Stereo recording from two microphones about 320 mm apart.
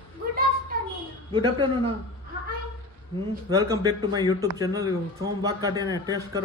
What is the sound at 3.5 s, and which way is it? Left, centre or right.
Speech, centre.